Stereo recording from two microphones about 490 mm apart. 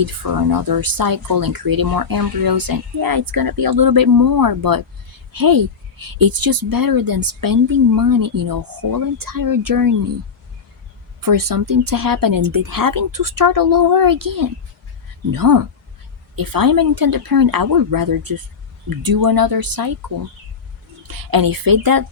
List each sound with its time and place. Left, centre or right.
0.0 s speech: right
11.2 s speech: right
21.1 s speech: right